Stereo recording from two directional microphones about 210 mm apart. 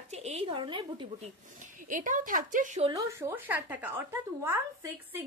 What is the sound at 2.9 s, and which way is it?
Speech, 15° right (ahead or behind).